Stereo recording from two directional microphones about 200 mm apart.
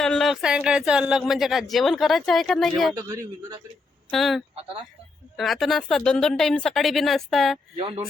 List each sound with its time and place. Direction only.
0.0 s speech: centre (ahead or behind)
2.9 s a man's voice: 15° right (ahead or behind)
4.1 s speech: centre (ahead or behind)